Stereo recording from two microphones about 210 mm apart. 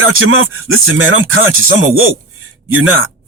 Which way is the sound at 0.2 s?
75° right (ahead or behind).